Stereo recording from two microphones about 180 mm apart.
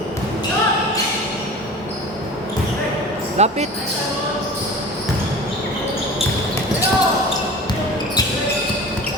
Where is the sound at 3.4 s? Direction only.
35° right (ahead or behind).